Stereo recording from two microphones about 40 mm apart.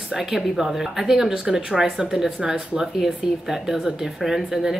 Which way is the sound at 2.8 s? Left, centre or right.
Centre.